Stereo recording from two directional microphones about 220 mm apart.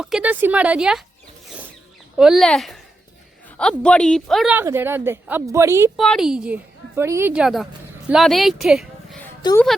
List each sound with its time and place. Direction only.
0.0 s a woman's voice: 5° right (ahead or behind)
2.1 s a woman's voice: centre (ahead or behind)
6.0 s a woman's voice: centre (ahead or behind)
9.4 s speech: 15° left (ahead or behind)